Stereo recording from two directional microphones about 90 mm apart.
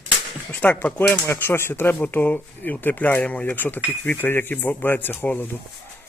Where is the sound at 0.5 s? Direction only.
20° left (ahead or behind).